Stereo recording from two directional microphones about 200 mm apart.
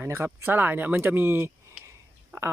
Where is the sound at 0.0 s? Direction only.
10° right (ahead or behind).